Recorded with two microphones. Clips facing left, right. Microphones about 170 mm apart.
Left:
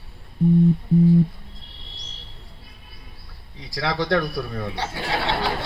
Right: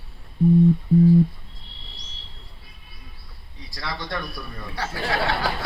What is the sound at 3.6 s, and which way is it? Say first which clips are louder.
A man's voice: left 8 dB; 85° left.